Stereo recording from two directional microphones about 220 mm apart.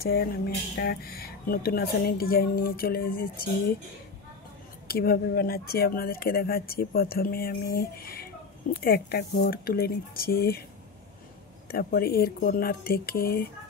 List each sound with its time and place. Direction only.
0.0 s speech: 45° left (ahead or behind)
4.8 s speech: 45° left (ahead or behind)
11.7 s speech: 45° left (ahead or behind)